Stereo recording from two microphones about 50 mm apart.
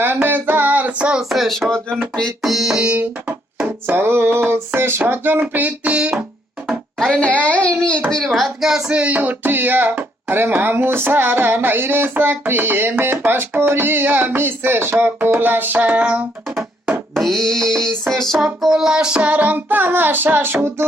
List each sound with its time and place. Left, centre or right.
0.0 s child singing: right
1.2 s speech: centre
2.8 s music: right
3.8 s speech: right
7.4 s speech: left
8.4 s speech: centre
8.9 s speech: right
17.2 s music: centre
18.6 s child singing: centre; by 20.8 s right